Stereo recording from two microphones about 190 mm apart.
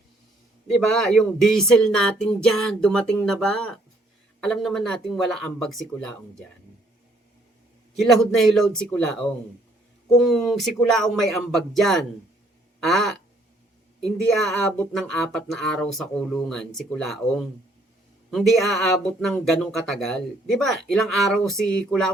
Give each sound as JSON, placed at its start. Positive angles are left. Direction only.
{"t": 0.7, "sound": "speech", "side_deg": 5}
{"t": 7.9, "sound": "speech", "side_deg": 0}